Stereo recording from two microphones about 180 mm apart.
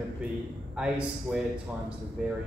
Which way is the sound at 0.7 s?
5° right (ahead or behind).